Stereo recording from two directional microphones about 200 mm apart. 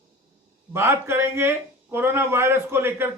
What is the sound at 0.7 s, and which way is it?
Speech, 10° right (ahead or behind).